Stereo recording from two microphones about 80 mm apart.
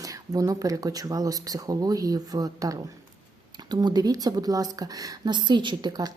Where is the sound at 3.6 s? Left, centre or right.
Right.